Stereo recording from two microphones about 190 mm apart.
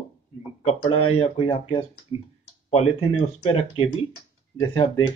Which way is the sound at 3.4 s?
30° left (ahead or behind).